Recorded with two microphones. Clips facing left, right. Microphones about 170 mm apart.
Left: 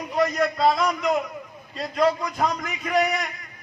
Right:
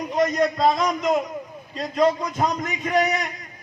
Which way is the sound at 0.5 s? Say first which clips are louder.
Right 1 dB; centre (ahead or behind).